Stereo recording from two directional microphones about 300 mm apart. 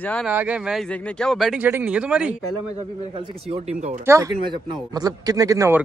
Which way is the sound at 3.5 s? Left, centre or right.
Right.